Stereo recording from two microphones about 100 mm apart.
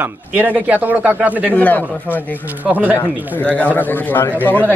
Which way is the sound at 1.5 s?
15° left (ahead or behind).